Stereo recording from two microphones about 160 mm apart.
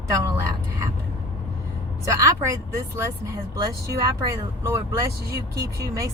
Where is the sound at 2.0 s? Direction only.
20° right (ahead or behind).